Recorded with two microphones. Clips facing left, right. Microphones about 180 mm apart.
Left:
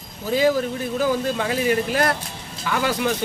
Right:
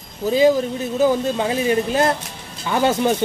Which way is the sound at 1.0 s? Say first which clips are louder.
Right 5 dB; 25° right (ahead or behind).